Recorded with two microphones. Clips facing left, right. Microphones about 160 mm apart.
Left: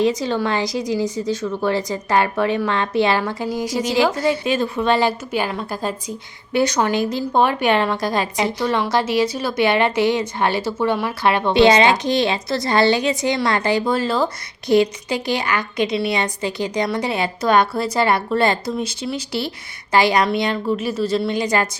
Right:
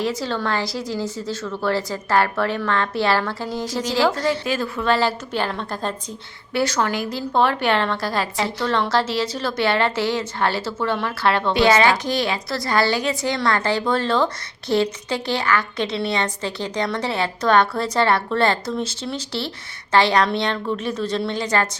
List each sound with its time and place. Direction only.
0.0 s a woman's voice: 20° left (ahead or behind)